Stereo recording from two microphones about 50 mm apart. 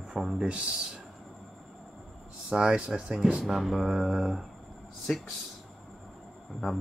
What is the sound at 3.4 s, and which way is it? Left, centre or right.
Speech, centre.